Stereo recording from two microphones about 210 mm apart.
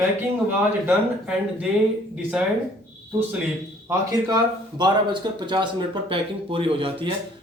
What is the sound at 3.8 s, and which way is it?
Speech, 15° right (ahead or behind).